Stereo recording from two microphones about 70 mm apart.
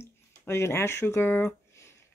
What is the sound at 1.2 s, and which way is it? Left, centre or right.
Speech, left.